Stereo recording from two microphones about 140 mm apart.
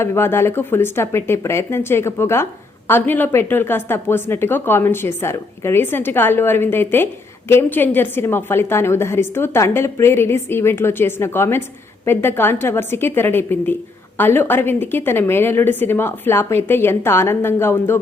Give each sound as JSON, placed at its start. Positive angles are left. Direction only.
{"t": 0.0, "sound": "speech", "side_deg": 15}